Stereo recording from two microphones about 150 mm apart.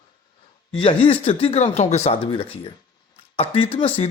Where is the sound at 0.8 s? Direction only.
40° left (ahead or behind).